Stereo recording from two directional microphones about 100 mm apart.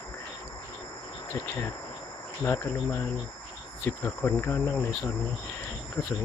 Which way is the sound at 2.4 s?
20° left (ahead or behind).